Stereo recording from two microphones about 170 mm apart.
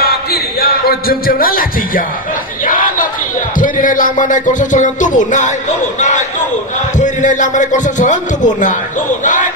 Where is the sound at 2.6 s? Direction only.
55° left (ahead or behind).